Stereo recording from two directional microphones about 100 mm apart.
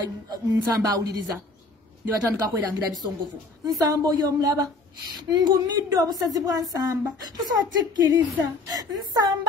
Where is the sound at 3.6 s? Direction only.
40° right (ahead or behind).